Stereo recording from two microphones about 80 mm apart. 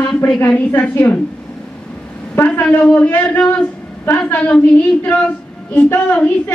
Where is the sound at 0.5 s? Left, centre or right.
Left.